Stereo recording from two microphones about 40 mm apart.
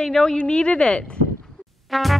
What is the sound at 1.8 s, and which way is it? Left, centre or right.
Music, centre.